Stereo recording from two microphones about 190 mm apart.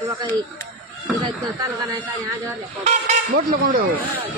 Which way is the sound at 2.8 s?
40° right (ahead or behind).